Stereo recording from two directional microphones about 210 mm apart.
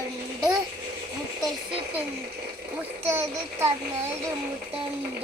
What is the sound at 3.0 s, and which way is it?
Speech, 10° right (ahead or behind).